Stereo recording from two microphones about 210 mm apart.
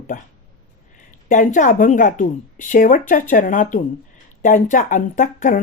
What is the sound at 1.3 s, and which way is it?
Speech, 40° left (ahead or behind).